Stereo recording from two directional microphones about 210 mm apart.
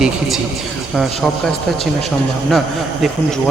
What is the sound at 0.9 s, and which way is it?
A man's voice, centre (ahead or behind).